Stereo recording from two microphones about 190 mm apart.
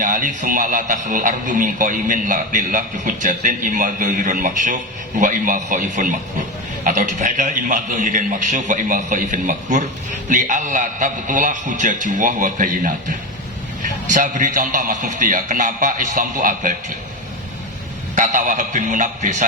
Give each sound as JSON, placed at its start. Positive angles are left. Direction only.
{"t": 0.0, "sound": "a man's voice", "side_deg": -45}
{"t": 18.1, "sound": "a man's voice", "side_deg": -40}